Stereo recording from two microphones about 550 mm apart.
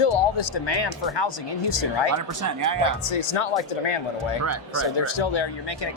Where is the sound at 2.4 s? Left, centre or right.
Right.